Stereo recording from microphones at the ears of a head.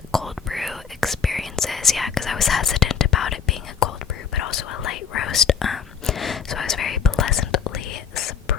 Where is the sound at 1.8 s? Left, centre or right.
Left.